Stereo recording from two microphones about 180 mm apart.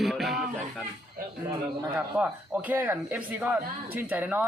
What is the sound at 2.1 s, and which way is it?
Speech, 10° right (ahead or behind).